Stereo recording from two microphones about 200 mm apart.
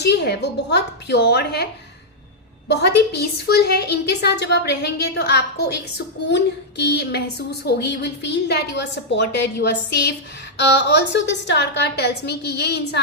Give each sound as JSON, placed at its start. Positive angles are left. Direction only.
{"t": 0.0, "sound": "a woman's voice", "side_deg": 55}
{"t": 2.6, "sound": "a woman's voice", "side_deg": 55}